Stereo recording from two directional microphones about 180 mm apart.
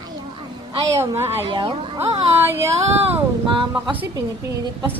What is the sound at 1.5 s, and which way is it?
A woman's voice, 25° right (ahead or behind).